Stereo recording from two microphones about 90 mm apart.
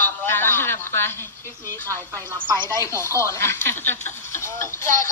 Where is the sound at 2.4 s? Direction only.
60° right (ahead or behind).